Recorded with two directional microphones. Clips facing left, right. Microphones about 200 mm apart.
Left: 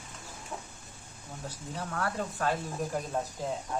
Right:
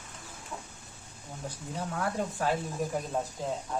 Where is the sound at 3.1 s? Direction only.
5° right (ahead or behind).